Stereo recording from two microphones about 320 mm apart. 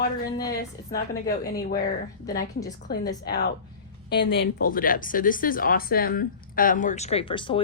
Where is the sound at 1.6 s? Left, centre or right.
Left.